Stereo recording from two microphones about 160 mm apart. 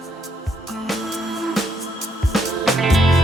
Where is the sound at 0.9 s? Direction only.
Centre (ahead or behind).